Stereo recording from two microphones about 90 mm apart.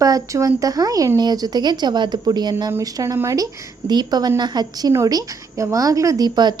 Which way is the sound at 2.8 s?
40° right (ahead or behind).